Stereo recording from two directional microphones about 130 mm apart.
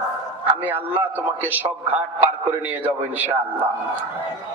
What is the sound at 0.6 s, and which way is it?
A man's voice, 15° right (ahead or behind).